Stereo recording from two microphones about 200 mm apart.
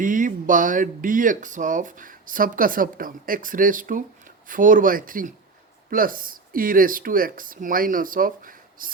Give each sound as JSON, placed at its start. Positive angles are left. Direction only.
{"t": 0.0, "sound": "speech", "side_deg": -40}